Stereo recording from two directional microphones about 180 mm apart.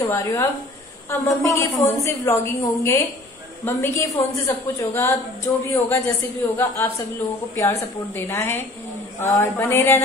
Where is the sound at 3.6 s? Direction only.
15° left (ahead or behind).